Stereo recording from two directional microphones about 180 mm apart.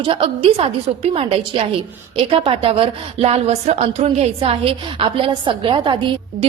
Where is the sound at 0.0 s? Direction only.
30° right (ahead or behind).